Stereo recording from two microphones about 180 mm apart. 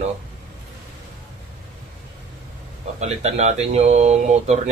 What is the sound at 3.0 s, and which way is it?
Speech, 35° right (ahead or behind).